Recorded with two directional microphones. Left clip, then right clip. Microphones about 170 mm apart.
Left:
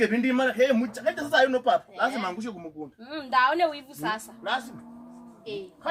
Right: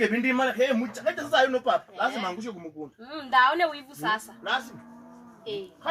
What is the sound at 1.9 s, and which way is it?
Speech, 5° left (ahead or behind).